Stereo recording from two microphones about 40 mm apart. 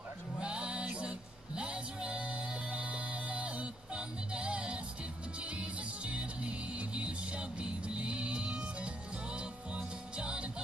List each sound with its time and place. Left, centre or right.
0.4 s music: right